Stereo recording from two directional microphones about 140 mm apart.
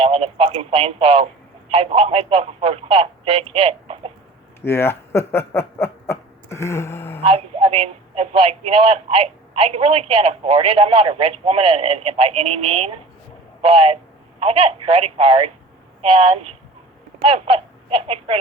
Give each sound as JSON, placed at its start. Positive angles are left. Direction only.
{"t": 0.0, "sound": "a man's voice", "side_deg": -45}
{"t": 4.6, "sound": "speech", "side_deg": 15}
{"t": 7.2, "sound": "a man's voice", "side_deg": -45}